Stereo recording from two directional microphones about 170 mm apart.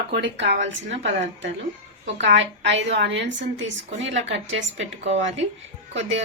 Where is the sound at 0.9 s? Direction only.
40° right (ahead or behind).